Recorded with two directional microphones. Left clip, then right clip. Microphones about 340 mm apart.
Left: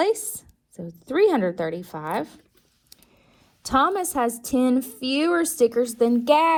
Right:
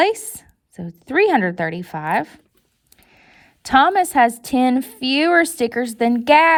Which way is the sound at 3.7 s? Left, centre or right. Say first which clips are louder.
Right 7 dB; right.